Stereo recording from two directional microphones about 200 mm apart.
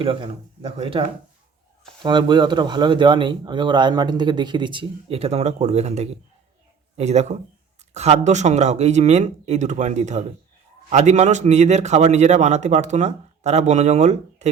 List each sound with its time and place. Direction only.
0.0 s a man's voice: 30° right (ahead or behind)